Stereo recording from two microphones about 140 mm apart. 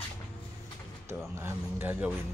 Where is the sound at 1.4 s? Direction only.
15° right (ahead or behind).